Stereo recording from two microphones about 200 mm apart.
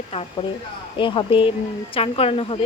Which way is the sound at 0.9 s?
25° left (ahead or behind).